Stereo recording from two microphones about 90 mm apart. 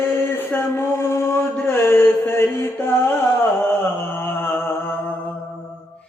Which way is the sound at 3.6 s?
25° left (ahead or behind).